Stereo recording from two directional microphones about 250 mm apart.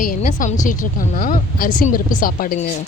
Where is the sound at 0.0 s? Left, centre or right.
Left.